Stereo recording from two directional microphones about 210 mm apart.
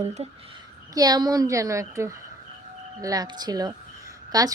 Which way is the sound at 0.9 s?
20° right (ahead or behind).